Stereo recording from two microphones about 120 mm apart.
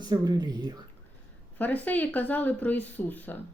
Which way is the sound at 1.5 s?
15° left (ahead or behind).